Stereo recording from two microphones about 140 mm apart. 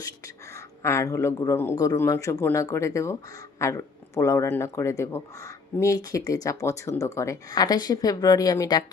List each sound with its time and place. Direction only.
0.5 s speech: 20° left (ahead or behind)